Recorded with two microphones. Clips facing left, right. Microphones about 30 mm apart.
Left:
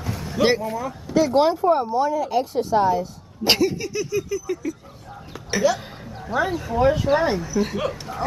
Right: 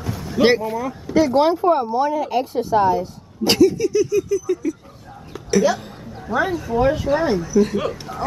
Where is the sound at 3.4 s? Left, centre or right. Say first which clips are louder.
Right 5 dB; centre.